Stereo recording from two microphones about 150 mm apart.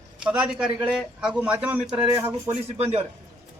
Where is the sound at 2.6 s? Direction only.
45° right (ahead or behind).